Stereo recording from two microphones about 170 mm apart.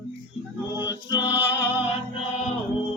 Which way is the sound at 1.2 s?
10° right (ahead or behind).